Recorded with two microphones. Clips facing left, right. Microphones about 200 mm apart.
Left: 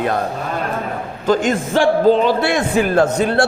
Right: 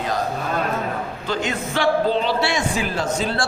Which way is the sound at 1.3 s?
45° left (ahead or behind).